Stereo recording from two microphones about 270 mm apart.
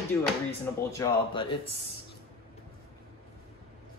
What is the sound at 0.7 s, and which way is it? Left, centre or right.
Speech, centre.